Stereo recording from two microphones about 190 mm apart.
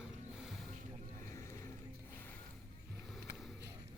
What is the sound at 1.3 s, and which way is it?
Vehicle, 15° left (ahead or behind).